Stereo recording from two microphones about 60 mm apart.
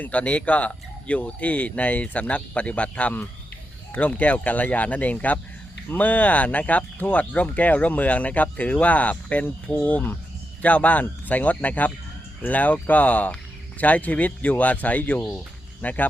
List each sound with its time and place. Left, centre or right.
0.0 s speech: left